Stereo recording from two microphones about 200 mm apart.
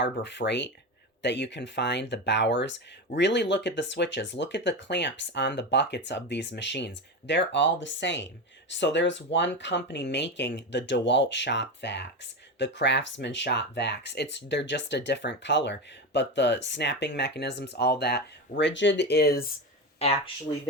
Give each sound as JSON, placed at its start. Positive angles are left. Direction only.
{"t": 0.0, "sound": "speech", "side_deg": 60}
{"t": 20.0, "sound": "speech", "side_deg": 30}